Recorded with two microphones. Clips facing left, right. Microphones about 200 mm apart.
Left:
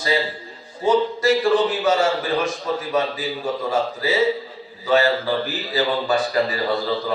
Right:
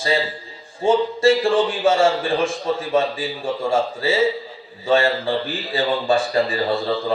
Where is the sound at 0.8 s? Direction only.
25° right (ahead or behind).